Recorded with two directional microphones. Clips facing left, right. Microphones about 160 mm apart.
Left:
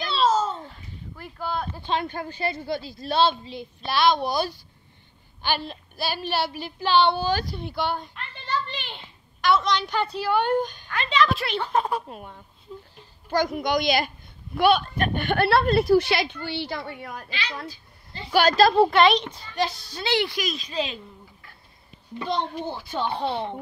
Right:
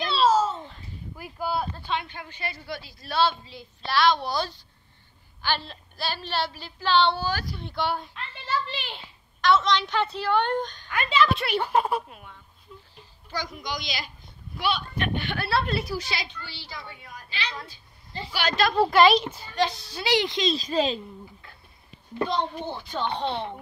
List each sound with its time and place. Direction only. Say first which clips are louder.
0.1 s a sound: right 1 dB; 5° right (ahead or behind)
1.9 s a woman's voice: left 4 dB; 40° left (ahead or behind); by 7.6 s 20° left (ahead or behind)
7.6 s a sound: left 1 dB; centre (ahead or behind)
9.4 s a woman's voice: even; centre (ahead or behind)
10.9 s a woman's voice: right 1 dB; 5° right (ahead or behind)
12.1 s a woman's voice: left 7 dB; 40° left (ahead or behind)
13.3 s speech: left 10 dB; 60° left (ahead or behind)
18.3 s a woman's voice: left 7 dB; 40° left (ahead or behind)
18.9 s a woman's voice: right 1 dB; centre (ahead or behind)
20.1 s speech: right 2 dB; 20° right (ahead or behind)
20.6 s a child's voice: right 4 dB; 40° right (ahead or behind)
22.8 s speech: left 1 dB; 10° left (ahead or behind)